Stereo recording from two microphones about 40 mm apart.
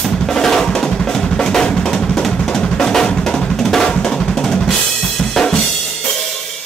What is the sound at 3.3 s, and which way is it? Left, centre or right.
Drum, centre.